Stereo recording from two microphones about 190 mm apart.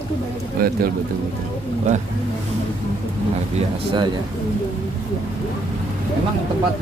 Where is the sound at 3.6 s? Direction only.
25° right (ahead or behind).